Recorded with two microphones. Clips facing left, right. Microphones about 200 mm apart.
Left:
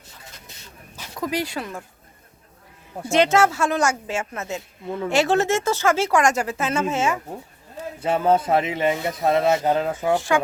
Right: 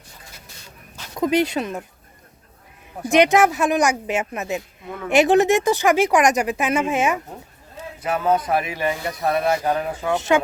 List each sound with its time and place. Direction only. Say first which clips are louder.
1.1 s speech: right 7 dB; 20° right (ahead or behind)
3.1 s speech: right 2 dB; 15° right (ahead or behind)
8.0 s speech: left 1 dB; 30° left (ahead or behind)
10.2 s speech: right 3 dB; 20° right (ahead or behind)